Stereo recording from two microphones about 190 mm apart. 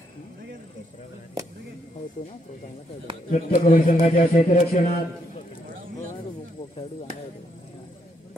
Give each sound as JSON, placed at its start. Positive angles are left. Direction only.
{"t": 3.3, "sound": "a man's voice", "side_deg": 45}